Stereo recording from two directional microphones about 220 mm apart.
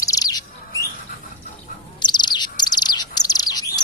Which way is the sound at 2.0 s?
20° left (ahead or behind).